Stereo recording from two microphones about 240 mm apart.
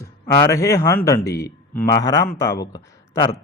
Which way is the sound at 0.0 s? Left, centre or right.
Centre.